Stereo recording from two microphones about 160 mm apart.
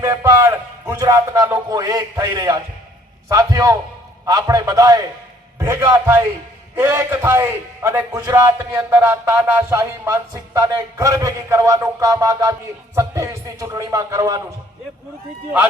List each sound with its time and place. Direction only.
0.0 s a man's voice: 20° right (ahead or behind)